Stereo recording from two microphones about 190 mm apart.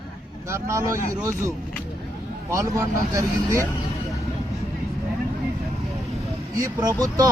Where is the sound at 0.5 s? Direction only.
15° right (ahead or behind).